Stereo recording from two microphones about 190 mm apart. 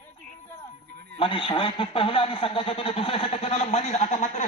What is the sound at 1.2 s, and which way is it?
Speech, 25° left (ahead or behind).